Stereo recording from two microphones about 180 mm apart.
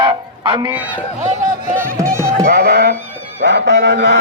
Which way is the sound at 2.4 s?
60° right (ahead or behind).